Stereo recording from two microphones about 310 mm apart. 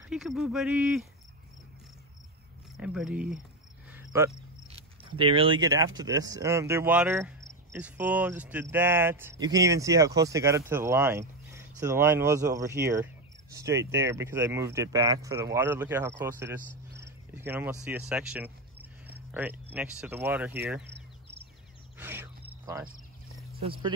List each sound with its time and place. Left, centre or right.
0.1 s speech: centre
2.8 s speech: centre
3.9 s cricket: centre
4.6 s speech: centre
12.9 s cricket: centre
13.7 s speech: centre
21.9 s a sound: centre